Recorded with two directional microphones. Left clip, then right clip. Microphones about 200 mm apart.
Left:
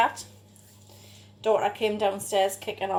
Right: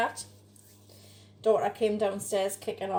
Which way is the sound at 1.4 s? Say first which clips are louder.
Left 2 dB; 20° left (ahead or behind).